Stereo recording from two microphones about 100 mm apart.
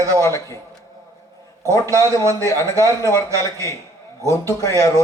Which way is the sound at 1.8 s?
30° right (ahead or behind).